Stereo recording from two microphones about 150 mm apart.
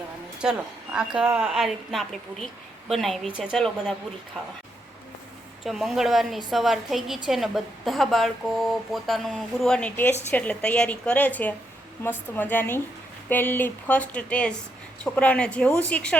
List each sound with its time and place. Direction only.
0.4 s speech: 5° right (ahead or behind)
5.6 s a woman's voice: centre (ahead or behind)